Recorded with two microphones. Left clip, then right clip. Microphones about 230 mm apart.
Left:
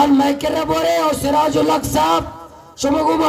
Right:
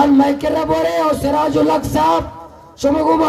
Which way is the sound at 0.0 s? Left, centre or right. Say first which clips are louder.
Right 1 dB; left.